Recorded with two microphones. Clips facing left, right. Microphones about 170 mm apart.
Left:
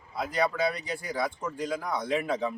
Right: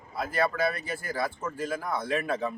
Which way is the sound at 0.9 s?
5° right (ahead or behind).